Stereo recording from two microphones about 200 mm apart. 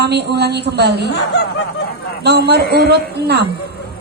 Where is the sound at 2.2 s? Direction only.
55° right (ahead or behind).